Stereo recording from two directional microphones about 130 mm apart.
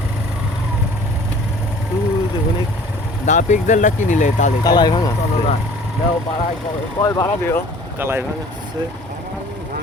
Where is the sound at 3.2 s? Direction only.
70° left (ahead or behind).